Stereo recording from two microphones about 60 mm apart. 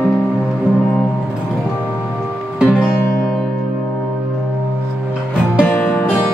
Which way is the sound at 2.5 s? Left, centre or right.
Centre.